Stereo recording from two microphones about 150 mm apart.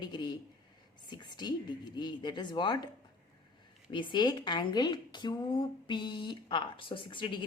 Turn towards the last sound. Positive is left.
turn(degrees=35)  # may be behind; listen again after turning